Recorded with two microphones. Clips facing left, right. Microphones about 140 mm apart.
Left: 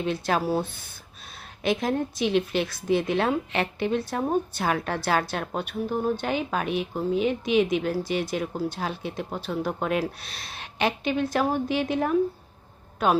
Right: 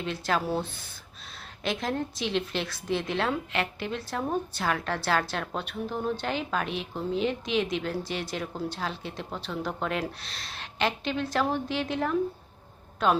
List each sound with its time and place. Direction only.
0.0 s speech: 20° left (ahead or behind)